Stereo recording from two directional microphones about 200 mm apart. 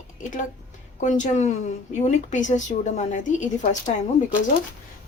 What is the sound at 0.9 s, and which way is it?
A woman's voice, 40° left (ahead or behind).